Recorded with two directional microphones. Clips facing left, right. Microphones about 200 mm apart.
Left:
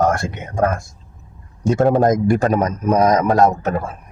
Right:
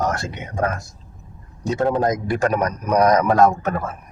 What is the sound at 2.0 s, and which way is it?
Speech, 45° left (ahead or behind).